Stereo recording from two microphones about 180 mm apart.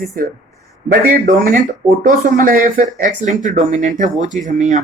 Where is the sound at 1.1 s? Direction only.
50° right (ahead or behind).